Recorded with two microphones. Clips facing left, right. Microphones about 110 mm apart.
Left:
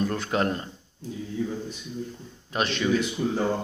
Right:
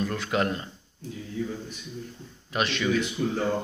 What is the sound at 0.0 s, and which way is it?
Speech, 35° left (ahead or behind).